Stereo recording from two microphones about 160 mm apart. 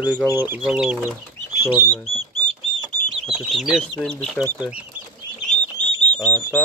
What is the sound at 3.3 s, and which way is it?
Speech, centre (ahead or behind).